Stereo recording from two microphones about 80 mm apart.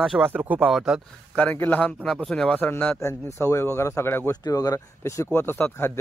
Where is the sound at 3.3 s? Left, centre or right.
Left.